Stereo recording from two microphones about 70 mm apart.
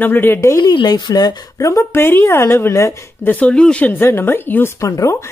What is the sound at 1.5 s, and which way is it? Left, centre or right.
Speech, left.